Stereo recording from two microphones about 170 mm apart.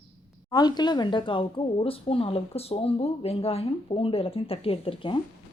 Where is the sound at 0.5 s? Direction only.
25° left (ahead or behind).